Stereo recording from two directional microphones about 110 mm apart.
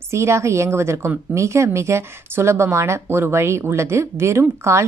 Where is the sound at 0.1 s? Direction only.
25° right (ahead or behind).